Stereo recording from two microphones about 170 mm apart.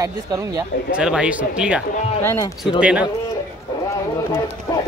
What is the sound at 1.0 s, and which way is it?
Speech, 5° right (ahead or behind).